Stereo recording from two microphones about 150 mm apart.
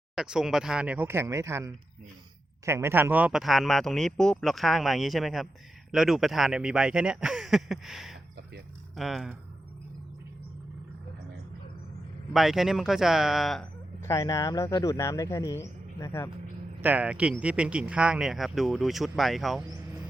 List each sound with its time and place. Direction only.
0.2 s speech: 5° right (ahead or behind)
12.3 s speech: centre (ahead or behind)
14.0 s speech: 20° left (ahead or behind)
16.8 s speech: 10° right (ahead or behind)